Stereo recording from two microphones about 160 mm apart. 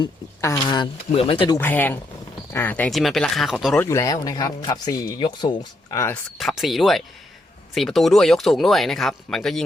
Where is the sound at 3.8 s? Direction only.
20° left (ahead or behind).